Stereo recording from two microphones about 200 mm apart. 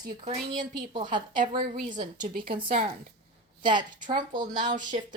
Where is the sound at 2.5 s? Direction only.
25° right (ahead or behind).